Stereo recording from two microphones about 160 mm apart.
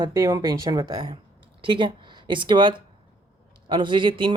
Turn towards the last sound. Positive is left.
turn(degrees=-30)  # may be behind; listen again after turning